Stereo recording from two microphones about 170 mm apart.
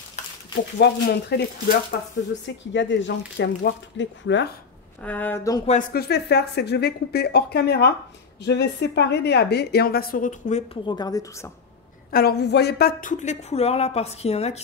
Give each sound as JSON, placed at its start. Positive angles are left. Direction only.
{"t": 0.8, "sound": "speech", "side_deg": 90}
{"t": 5.0, "sound": "speech", "side_deg": 10}
{"t": 5.9, "sound": "a woman's voice", "side_deg": 70}
{"t": 8.5, "sound": "a woman's voice", "side_deg": 85}
{"t": 10.7, "sound": "a woman's voice", "side_deg": 25}
{"t": 12.1, "sound": "a woman's voice", "side_deg": 65}
{"t": 13.1, "sound": "a woman's voice", "side_deg": 45}